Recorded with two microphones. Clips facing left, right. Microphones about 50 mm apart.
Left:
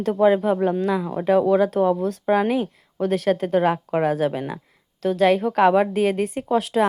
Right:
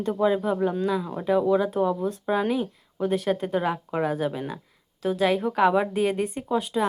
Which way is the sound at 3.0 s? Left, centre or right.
Left.